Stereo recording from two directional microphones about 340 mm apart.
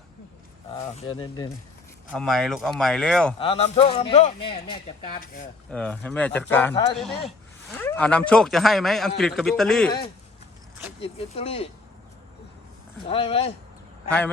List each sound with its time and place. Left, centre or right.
0.8 s a man's voice: centre
2.1 s speech: centre
3.3 s a man's voice: centre
5.7 s speech: centre
11.0 s a man's voice: centre
13.1 s a man's voice: centre